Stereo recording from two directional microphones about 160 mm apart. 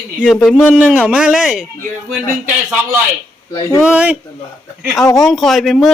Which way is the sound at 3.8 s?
10° right (ahead or behind).